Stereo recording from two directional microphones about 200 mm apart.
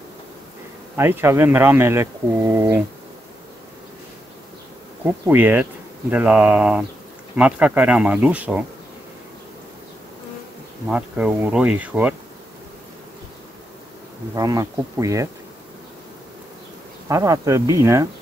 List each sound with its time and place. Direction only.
0.9 s speech: 10° right (ahead or behind)
5.0 s speech: 10° right (ahead or behind)
10.9 s speech: 5° right (ahead or behind)
14.3 s speech: 15° right (ahead or behind)
17.1 s speech: 15° right (ahead or behind)